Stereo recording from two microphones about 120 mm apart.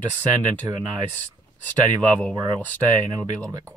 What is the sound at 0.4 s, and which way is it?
Speech, 40° right (ahead or behind).